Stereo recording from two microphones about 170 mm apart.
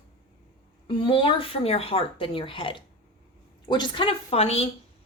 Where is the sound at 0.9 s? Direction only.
30° left (ahead or behind).